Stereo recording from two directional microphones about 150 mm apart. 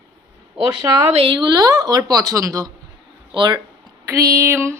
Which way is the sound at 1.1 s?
40° right (ahead or behind).